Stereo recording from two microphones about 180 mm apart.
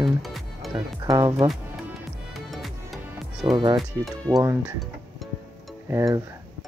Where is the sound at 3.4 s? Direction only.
25° right (ahead or behind).